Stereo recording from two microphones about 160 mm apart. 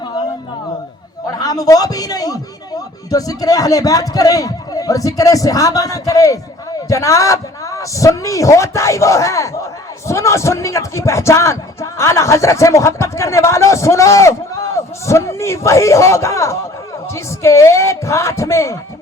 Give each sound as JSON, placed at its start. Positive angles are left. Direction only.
{"t": 1.4, "sound": "a man's voice", "side_deg": 25}